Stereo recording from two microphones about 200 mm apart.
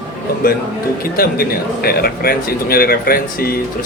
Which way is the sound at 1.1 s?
50° left (ahead or behind).